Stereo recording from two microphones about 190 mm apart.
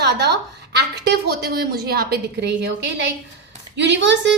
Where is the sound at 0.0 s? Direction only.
60° right (ahead or behind).